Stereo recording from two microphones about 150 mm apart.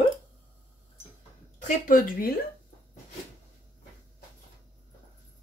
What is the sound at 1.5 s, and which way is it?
Speech, 60° left (ahead or behind).